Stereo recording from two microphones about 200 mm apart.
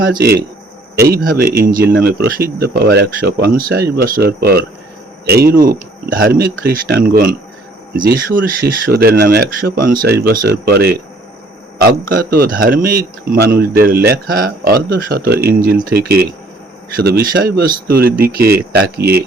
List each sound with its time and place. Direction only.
0.1 s speech: 50° right (ahead or behind)